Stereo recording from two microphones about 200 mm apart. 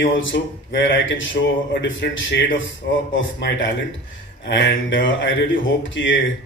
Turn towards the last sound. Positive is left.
turn(degrees=70)  # may be behind; listen again after turning